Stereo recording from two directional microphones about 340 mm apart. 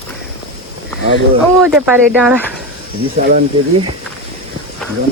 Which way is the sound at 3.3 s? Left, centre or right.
Right.